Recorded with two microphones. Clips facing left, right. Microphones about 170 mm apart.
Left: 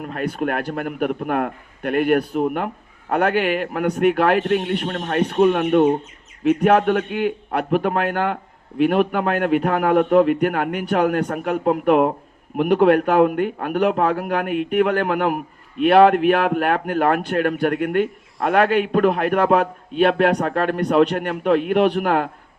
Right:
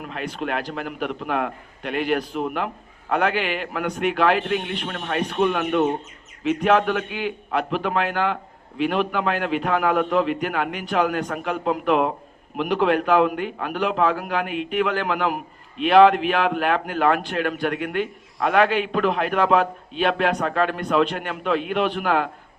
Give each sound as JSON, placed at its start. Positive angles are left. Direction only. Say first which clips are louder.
{"t": 0.0, "sound": "a man's voice", "louder": "left 5 dB", "side_deg": 45}
{"t": 4.9, "sound": "speech", "louder": "left 4 dB", "side_deg": 40}
{"t": 6.4, "sound": "a man's voice", "louder": "left 4 dB", "side_deg": 55}